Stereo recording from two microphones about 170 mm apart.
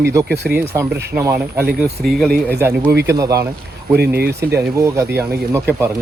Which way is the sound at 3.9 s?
70° right (ahead or behind).